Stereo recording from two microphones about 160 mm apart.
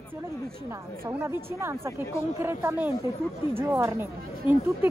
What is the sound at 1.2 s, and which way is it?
Speech, 15° right (ahead or behind).